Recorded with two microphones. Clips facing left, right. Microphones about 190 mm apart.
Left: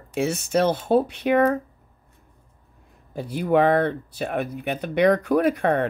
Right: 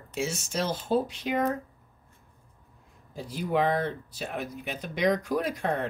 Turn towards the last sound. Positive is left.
turn(degrees=60)  # may be behind; listen again after turning